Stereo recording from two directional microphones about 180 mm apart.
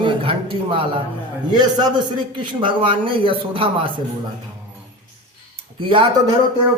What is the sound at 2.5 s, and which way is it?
A man's voice, 30° right (ahead or behind).